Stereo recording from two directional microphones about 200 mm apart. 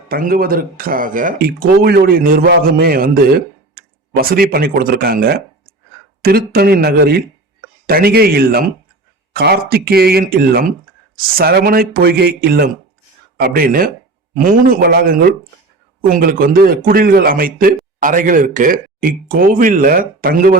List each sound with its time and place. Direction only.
0.1 s speech: 45° right (ahead or behind)